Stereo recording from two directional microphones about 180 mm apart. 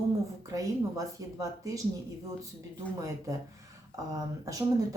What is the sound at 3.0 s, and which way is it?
Speech, 20° right (ahead or behind).